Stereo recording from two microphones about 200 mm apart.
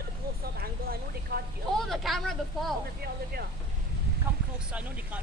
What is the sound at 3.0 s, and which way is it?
Speech, 50° right (ahead or behind).